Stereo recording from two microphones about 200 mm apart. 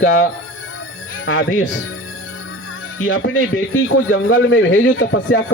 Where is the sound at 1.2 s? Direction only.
80° left.